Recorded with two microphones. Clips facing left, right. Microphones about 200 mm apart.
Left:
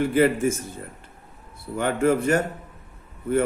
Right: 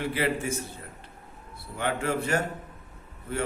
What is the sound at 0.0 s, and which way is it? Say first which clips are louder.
Speech: left 10 dB; 50° left (ahead or behind).